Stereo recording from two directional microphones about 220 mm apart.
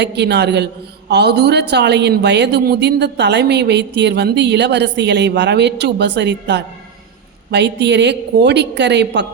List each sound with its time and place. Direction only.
0.0 s speech: 50° right (ahead or behind)